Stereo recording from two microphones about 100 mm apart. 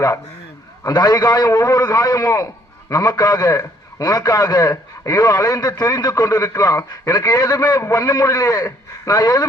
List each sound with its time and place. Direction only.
0.9 s a man's voice: 40° left (ahead or behind)